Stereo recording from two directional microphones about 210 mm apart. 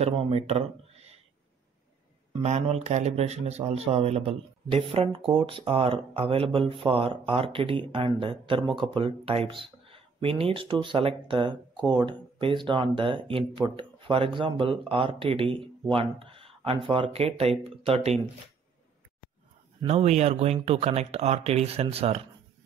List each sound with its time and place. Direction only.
0.0 s speech: 30° right (ahead or behind)
2.4 s speech: 30° right (ahead or behind)
19.8 s speech: 30° right (ahead or behind)